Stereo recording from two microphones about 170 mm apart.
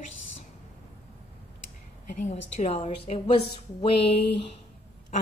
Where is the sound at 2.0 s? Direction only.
45° left (ahead or behind).